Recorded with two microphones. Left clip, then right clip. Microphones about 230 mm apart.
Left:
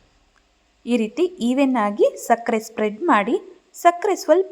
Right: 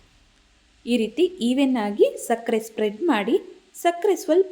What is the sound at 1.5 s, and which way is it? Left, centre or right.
A woman's voice, centre.